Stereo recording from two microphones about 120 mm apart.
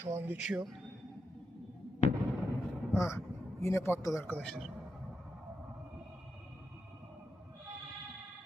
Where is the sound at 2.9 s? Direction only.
25° left (ahead or behind).